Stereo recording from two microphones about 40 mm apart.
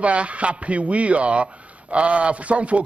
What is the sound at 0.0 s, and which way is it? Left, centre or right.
A man's voice, right.